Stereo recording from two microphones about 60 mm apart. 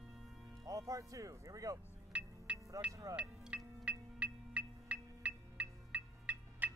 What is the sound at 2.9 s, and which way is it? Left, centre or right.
Speech, right.